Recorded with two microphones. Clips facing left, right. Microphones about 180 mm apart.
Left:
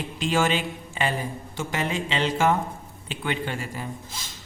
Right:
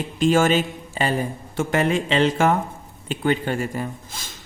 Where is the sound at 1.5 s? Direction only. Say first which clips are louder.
Right 8 dB; 55° right (ahead or behind).